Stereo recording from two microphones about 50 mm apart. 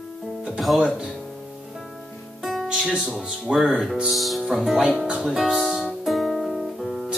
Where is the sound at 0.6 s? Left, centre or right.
Centre.